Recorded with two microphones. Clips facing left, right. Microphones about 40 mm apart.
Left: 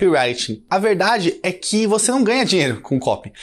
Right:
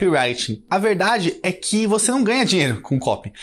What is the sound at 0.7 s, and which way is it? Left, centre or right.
Speech, right.